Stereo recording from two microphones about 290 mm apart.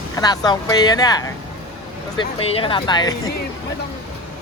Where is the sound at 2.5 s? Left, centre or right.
Centre.